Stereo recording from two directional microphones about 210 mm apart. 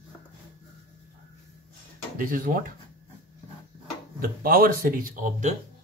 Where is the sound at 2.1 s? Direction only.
40° right (ahead or behind).